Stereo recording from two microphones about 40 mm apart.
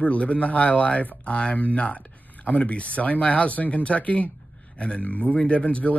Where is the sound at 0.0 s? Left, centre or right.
Left.